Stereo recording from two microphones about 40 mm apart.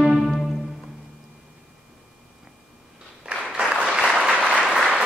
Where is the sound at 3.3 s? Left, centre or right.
Right.